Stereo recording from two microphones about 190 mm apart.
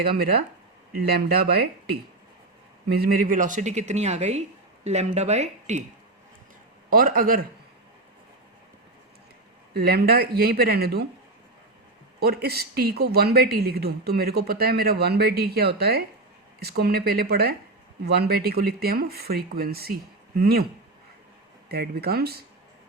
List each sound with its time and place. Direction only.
0.0 s speech: 55° right (ahead or behind)
3.0 s a woman's voice: 50° right (ahead or behind)
6.9 s speech: 50° right (ahead or behind)
9.7 s speech: 55° right (ahead or behind)
12.2 s speech: 55° right (ahead or behind)
21.7 s speech: 55° right (ahead or behind)